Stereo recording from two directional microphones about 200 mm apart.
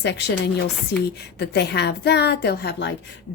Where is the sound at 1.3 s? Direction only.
55° left (ahead or behind).